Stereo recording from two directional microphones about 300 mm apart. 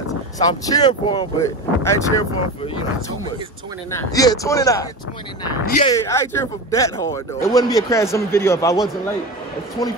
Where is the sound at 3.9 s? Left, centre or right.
Centre.